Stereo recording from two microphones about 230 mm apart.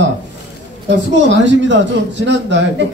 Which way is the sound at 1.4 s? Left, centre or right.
Right.